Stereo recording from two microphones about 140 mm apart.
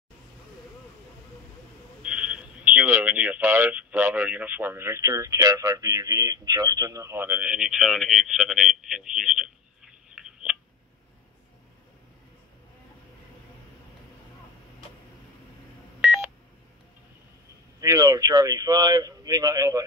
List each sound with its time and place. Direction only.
2.0 s speech: 10° right (ahead or behind)
16.0 s telephone dialing: 10° right (ahead or behind)
17.7 s speech: 25° right (ahead or behind)